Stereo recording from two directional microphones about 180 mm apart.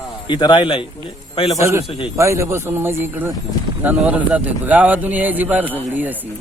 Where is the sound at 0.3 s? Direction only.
25° left (ahead or behind).